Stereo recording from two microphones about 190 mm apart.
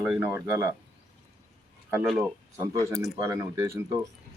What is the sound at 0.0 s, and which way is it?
Speech, 10° right (ahead or behind).